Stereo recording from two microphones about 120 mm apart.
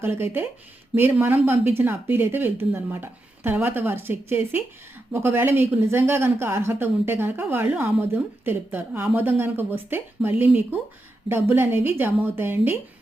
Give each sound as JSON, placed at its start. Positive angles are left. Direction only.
{"t": 0.0, "sound": "a woman's voice", "side_deg": -20}